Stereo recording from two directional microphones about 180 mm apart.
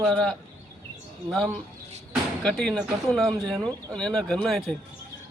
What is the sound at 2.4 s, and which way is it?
A man's voice, 5° left (ahead or behind).